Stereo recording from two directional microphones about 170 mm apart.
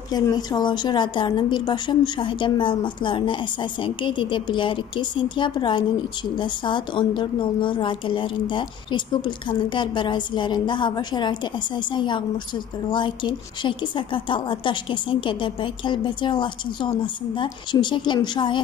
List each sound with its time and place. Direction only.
0.1 s a woman's voice: 25° left (ahead or behind)